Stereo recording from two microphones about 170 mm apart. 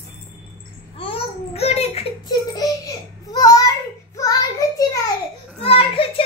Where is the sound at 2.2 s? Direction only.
25° left (ahead or behind).